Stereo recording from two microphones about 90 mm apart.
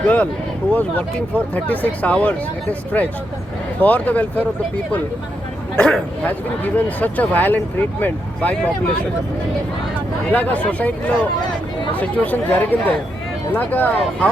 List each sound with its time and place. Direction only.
0.0 s speech: 15° left (ahead or behind)
5.7 s speech: 10° left (ahead or behind)
10.3 s speech: 15° left (ahead or behind)